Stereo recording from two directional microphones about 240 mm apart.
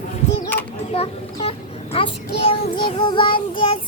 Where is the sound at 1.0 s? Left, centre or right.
Left.